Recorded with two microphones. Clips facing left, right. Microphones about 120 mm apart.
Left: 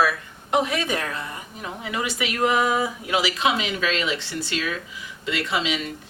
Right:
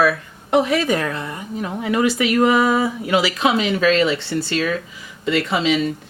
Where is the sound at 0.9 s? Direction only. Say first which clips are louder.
Right 6 dB; 50° right (ahead or behind).